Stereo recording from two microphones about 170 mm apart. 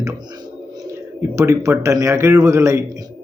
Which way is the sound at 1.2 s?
15° right (ahead or behind).